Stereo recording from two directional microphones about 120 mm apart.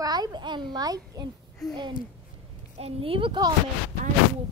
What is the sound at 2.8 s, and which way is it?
Speech, 50° right (ahead or behind).